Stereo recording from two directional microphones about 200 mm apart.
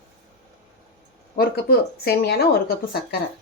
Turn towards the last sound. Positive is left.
turn(degrees=50)  # may be behind; listen again after turning